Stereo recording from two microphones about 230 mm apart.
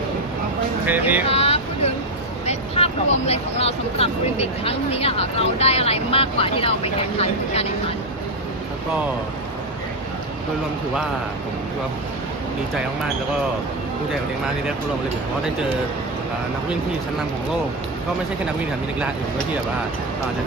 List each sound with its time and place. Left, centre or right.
0.9 s speech: centre
1.3 s vehicle: left
2.5 s speech: left